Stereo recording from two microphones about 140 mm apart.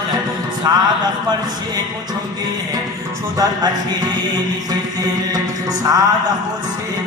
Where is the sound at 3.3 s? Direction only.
25° right (ahead or behind).